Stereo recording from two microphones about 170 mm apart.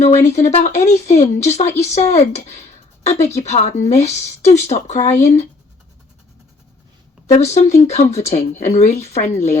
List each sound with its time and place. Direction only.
0.0 s speech: 40° left (ahead or behind)
7.3 s speech: 40° left (ahead or behind)